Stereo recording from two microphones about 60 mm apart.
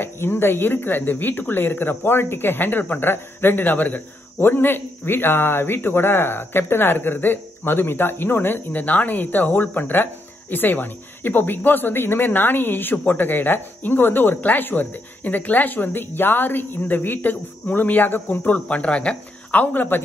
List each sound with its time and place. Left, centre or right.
0.0 s speech: left